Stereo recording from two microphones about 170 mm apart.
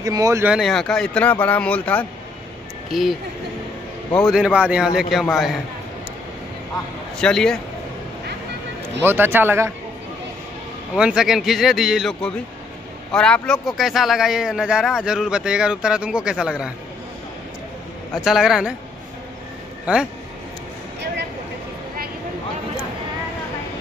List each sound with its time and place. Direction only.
0.0 s speech: 20° right (ahead or behind)
0.5 s speech: centre (ahead or behind)
4.2 s a man's voice: 5° right (ahead or behind)
7.2 s a man's voice: 5° left (ahead or behind)
9.0 s speech: 15° right (ahead or behind)
11.0 s a man's voice: 5° right (ahead or behind)
18.1 s a man's voice: centre (ahead or behind)
19.9 s speech: 5° right (ahead or behind)